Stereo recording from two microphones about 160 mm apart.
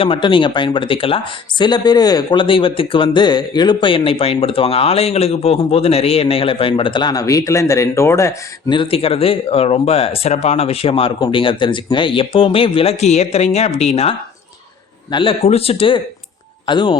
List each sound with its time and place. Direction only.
0.0 s speech: 35° left (ahead or behind); by 8.4 s 15° left (ahead or behind)
8.7 s speech: 35° left (ahead or behind)